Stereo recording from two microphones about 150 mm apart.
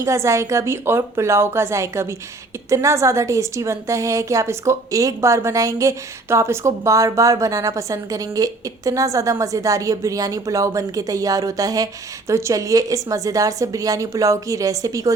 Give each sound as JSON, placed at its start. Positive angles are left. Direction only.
{"t": 0.0, "sound": "a woman's voice", "side_deg": -20}